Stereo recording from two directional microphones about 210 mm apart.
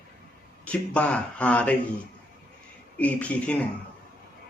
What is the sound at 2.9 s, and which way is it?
Speech, 5° left (ahead or behind).